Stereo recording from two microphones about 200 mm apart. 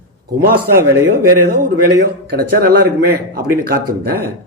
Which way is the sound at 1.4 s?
55° right (ahead or behind).